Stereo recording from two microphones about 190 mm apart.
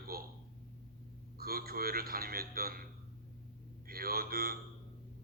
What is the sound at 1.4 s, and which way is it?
A man's voice, 50° right (ahead or behind).